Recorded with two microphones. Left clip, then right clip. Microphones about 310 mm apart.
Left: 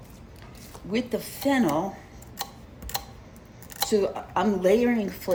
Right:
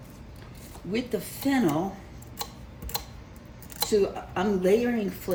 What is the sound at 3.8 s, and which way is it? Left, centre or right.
A woman's voice, left.